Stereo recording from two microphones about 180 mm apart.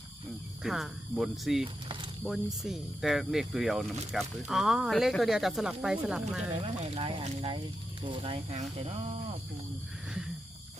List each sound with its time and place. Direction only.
0.6 s speech: centre (ahead or behind)
6.5 s speech: 30° right (ahead or behind)